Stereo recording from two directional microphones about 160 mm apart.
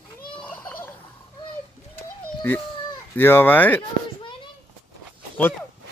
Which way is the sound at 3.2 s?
15° left (ahead or behind).